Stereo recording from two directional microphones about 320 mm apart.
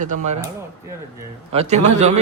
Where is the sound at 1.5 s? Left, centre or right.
Right.